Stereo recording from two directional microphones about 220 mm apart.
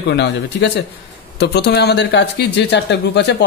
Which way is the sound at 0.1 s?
50° left (ahead or behind).